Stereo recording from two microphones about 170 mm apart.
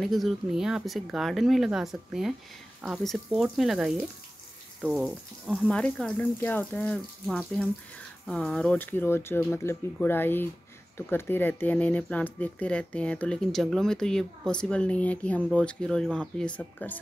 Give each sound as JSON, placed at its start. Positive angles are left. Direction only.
{"t": 0.0, "sound": "speech", "side_deg": 0}
{"t": 3.3, "sound": "speech", "side_deg": -10}